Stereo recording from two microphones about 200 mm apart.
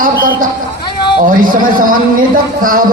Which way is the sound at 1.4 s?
45° right (ahead or behind).